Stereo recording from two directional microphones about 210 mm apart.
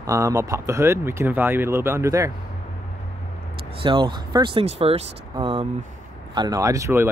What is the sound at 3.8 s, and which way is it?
Speech, 25° right (ahead or behind).